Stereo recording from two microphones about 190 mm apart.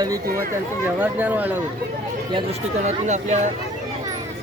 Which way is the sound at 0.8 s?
10° right (ahead or behind).